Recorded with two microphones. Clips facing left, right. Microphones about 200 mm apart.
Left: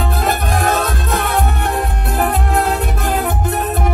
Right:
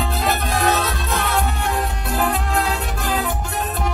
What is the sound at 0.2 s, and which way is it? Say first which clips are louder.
Music: left 2 dB; 50° left (ahead or behind).